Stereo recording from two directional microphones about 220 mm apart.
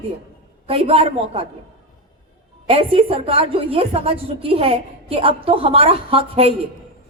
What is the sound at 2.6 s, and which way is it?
A woman's voice, 25° right (ahead or behind).